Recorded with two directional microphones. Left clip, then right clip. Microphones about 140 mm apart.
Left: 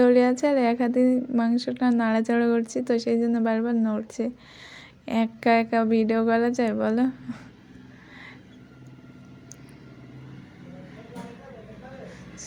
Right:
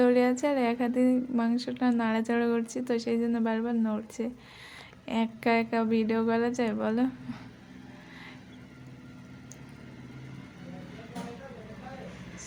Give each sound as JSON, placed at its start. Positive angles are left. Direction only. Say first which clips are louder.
{"t": 0.0, "sound": "a woman's voice", "louder": "left 5 dB", "side_deg": 25}